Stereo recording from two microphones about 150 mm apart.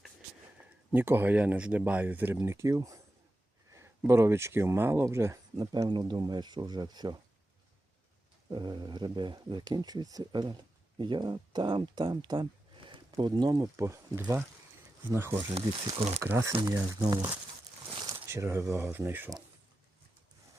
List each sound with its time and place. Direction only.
0.9 s speech: 15° right (ahead or behind)
5.5 s speech: 30° right (ahead or behind)
8.4 s speech: 30° right (ahead or behind)
15.6 s speech: 30° right (ahead or behind)
16.2 s speech: 15° right (ahead or behind)
17.9 s a sound: 25° right (ahead or behind)
18.7 s speech: 15° right (ahead or behind)